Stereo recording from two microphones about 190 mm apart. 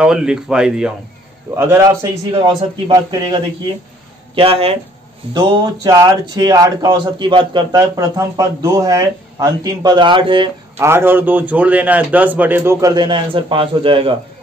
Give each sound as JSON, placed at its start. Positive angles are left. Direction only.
{"t": 0.0, "sound": "a man's voice", "side_deg": -5}
{"t": 4.4, "sound": "speech", "side_deg": -30}
{"t": 5.9, "sound": "a man's voice", "side_deg": -20}
{"t": 10.8, "sound": "a man's voice", "side_deg": -15}